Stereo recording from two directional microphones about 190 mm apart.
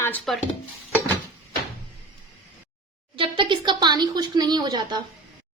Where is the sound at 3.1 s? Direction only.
25° right (ahead or behind).